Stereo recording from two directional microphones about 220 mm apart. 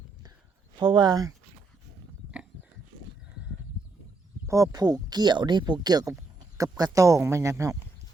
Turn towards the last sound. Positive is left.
turn(degrees=-15)  # may be behind; listen again after turning